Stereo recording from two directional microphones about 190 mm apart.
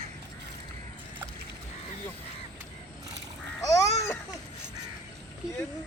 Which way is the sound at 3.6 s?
15° left (ahead or behind).